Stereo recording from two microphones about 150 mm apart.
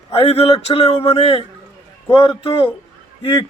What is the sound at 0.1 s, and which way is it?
Speech, 40° left (ahead or behind).